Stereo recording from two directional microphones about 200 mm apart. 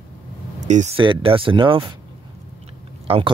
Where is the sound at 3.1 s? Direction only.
30° right (ahead or behind).